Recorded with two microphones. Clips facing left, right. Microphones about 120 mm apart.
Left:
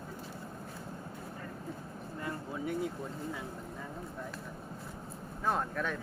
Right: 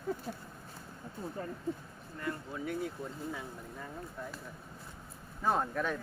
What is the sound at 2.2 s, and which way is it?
Speech, 20° left (ahead or behind).